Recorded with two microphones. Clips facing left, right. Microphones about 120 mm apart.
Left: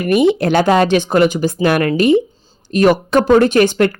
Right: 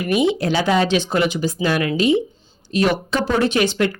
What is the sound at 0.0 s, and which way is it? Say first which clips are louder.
Speech: left 5 dB; 55° left (ahead or behind).